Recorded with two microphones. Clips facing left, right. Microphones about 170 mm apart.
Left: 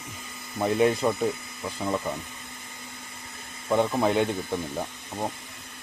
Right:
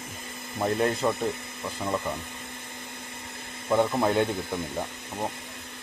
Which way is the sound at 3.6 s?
Centre (ahead or behind).